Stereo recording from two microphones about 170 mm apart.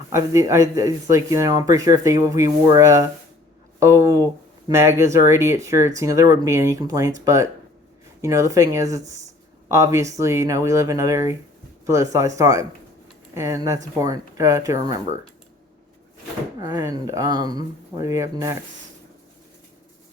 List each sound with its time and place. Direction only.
0.1 s speech: 20° right (ahead or behind)
8.2 s speech: 15° right (ahead or behind)
16.6 s speech: 20° right (ahead or behind)